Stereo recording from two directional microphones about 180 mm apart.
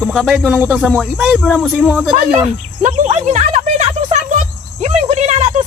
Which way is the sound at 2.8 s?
40° right (ahead or behind).